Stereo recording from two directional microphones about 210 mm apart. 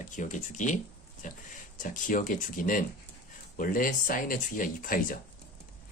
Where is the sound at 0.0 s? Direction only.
35° left (ahead or behind).